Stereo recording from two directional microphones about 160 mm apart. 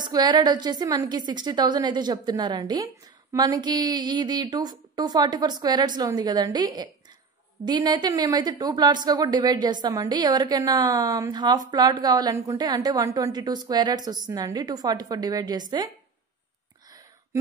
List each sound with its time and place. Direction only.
0.1 s a woman's voice: 25° right (ahead or behind)